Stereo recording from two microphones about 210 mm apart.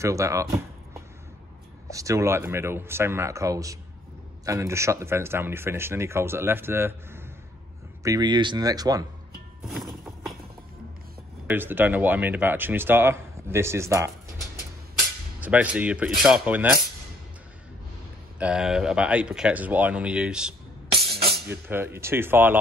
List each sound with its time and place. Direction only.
0.0 s speech: 15° right (ahead or behind)
9.6 s music: centre (ahead or behind)
11.4 s speech: 10° right (ahead or behind)
15.4 s speech: 5° right (ahead or behind)
18.4 s speech: 5° right (ahead or behind)
21.1 s music: 50° right (ahead or behind)
21.5 s speech: 10° right (ahead or behind)